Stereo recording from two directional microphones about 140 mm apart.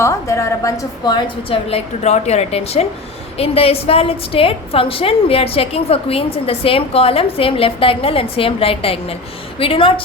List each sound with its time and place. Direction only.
0.0 s a woman's voice: 20° left (ahead or behind); by 9.9 s 40° left (ahead or behind)